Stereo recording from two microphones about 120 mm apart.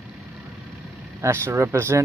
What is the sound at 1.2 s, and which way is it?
Speech, 20° right (ahead or behind).